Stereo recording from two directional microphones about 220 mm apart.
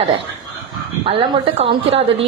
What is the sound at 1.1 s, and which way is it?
Speech, 25° right (ahead or behind).